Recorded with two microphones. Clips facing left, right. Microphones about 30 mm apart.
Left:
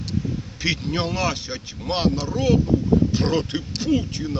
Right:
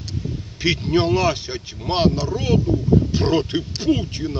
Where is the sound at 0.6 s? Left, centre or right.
Centre.